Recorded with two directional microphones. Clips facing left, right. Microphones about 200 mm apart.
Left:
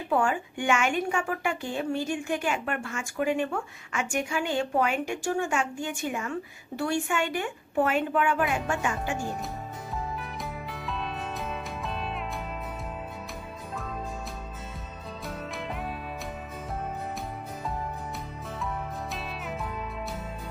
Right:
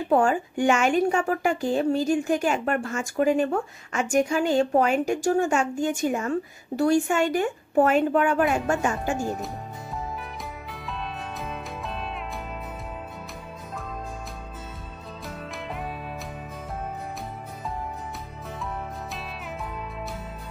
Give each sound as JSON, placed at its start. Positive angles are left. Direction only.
{"t": 0.1, "sound": "a woman's voice", "side_deg": -40}
{"t": 10.1, "sound": "music", "side_deg": 0}
{"t": 15.2, "sound": "music", "side_deg": 0}
{"t": 19.1, "sound": "music", "side_deg": 0}